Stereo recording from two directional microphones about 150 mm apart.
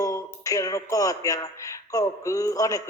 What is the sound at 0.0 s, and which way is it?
Speech, 20° left (ahead or behind).